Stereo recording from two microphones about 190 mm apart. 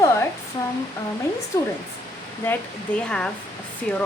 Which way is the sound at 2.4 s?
10° left (ahead or behind).